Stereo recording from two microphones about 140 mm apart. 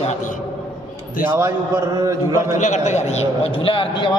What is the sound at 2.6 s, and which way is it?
A man's voice, 60° left (ahead or behind).